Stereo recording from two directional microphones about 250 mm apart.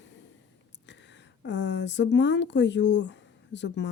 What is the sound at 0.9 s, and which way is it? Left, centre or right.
Speech, left.